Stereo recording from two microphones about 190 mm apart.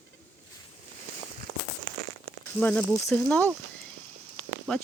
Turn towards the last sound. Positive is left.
turn(degrees=0)  # may be behind; listen again after turning